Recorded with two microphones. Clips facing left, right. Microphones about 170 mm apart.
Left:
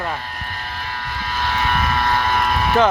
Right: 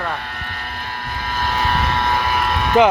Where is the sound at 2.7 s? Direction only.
15° right (ahead or behind).